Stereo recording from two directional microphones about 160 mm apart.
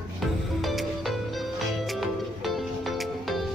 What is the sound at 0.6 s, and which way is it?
Music, centre (ahead or behind).